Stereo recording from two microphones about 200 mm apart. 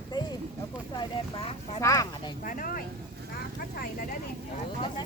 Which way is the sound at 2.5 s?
45° left (ahead or behind).